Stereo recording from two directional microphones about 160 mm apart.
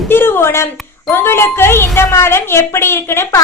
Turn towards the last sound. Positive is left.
turn(degrees=15)  # may be behind; listen again after turning